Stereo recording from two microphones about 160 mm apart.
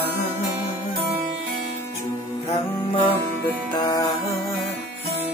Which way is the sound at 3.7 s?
25° left (ahead or behind).